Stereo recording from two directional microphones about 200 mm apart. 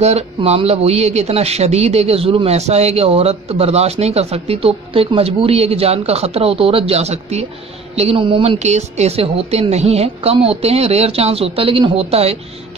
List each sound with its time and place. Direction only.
0.0 s a man's voice: 30° right (ahead or behind)